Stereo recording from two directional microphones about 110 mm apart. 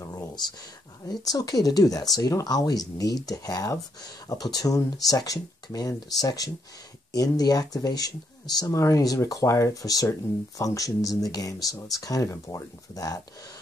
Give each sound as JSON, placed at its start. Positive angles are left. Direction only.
{"t": 1.2, "sound": "speech", "side_deg": 35}